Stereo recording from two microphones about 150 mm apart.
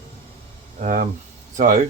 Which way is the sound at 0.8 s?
60° right (ahead or behind).